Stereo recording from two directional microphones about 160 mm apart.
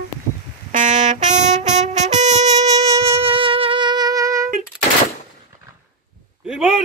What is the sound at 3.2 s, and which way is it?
Music, 35° right (ahead or behind).